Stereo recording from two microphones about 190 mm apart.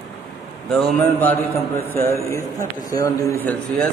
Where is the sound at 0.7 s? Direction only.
10° left (ahead or behind).